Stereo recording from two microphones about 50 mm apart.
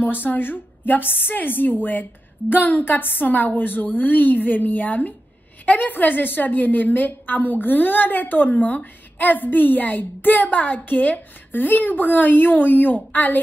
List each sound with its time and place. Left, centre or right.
0.0 s a woman's voice: left